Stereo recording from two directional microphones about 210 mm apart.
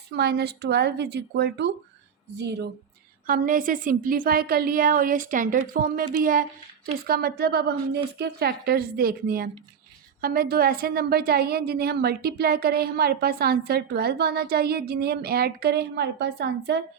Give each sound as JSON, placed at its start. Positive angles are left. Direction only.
{"t": 0.2, "sound": "a woman's voice", "side_deg": -50}
{"t": 3.2, "sound": "a woman's voice", "side_deg": -40}